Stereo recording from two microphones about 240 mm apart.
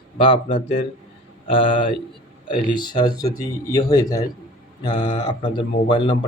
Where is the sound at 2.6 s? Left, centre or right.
Centre.